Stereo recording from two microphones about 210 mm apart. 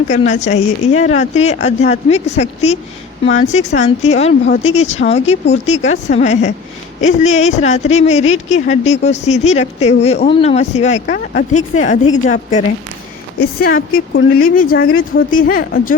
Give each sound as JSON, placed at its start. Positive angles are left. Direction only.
{"t": 0.1, "sound": "speech", "side_deg": 35}